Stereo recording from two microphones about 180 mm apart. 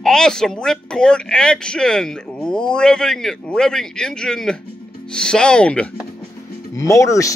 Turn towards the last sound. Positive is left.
turn(degrees=20)  # may be behind; listen again after turning